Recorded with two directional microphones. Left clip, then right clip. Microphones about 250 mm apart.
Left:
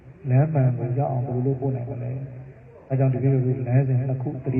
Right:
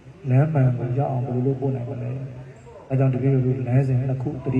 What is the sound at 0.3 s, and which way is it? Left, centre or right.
A man's voice, right.